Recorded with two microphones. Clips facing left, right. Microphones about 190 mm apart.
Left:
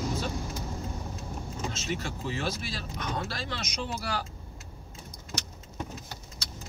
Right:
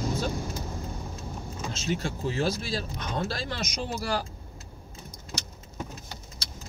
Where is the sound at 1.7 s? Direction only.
30° right (ahead or behind).